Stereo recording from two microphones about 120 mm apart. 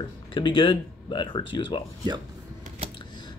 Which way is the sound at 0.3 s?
40° left (ahead or behind).